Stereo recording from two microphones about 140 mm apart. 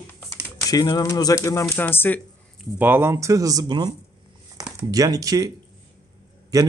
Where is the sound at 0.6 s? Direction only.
25° left (ahead or behind).